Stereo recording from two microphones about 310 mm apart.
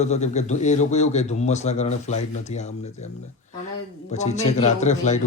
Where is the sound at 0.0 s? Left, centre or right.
Left.